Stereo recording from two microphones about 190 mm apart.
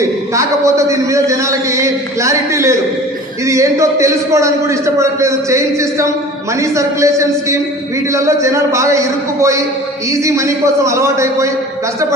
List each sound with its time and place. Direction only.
0.3 s a man's voice: 15° right (ahead or behind)